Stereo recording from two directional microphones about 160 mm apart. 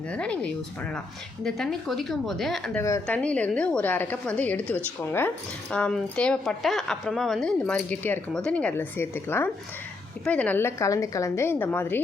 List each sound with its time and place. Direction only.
0.1 s a woman's voice: 5° left (ahead or behind)
2.8 s speech: 20° left (ahead or behind)
3.2 s a woman's voice: 10° left (ahead or behind)